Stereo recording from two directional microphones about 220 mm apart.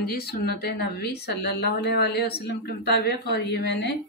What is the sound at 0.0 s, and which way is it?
Speech, 45° left (ahead or behind).